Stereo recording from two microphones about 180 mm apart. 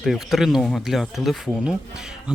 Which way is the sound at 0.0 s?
Centre (ahead or behind).